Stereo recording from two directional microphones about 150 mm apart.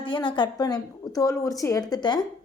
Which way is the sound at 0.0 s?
30° left (ahead or behind).